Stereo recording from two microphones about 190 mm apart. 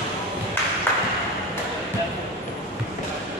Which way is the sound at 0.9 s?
10° left (ahead or behind).